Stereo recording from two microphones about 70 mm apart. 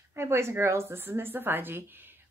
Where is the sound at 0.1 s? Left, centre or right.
Right.